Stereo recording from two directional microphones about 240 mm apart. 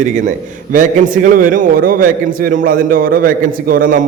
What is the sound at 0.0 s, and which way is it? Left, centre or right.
A man's voice, right.